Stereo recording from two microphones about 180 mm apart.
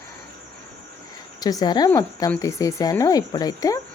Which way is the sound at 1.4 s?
20° left (ahead or behind).